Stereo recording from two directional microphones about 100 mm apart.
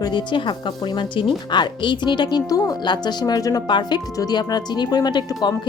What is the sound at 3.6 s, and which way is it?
Speech, 50° left (ahead or behind).